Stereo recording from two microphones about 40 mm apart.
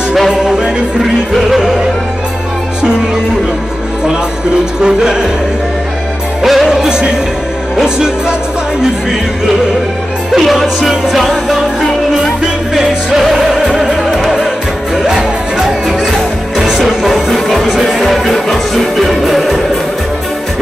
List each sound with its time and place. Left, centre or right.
0.3 s music: centre
1.3 s music: centre
4.8 s music: centre
6.4 s music: centre
10.3 s music: centre
12.7 s music: centre